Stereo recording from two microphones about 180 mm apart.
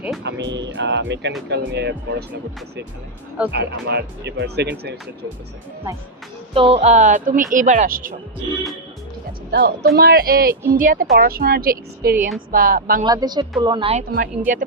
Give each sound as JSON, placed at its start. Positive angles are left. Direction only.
{"t": 0.2, "sound": "speech", "side_deg": -75}
{"t": 3.5, "sound": "speech", "side_deg": -70}
{"t": 6.5, "sound": "speech", "side_deg": -30}
{"t": 9.5, "sound": "a woman's voice", "side_deg": -65}
{"t": 13.1, "sound": "speech", "side_deg": -20}
{"t": 14.1, "sound": "speech", "side_deg": -50}